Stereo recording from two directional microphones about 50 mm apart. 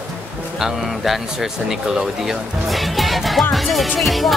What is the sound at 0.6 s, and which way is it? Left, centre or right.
Speech, centre.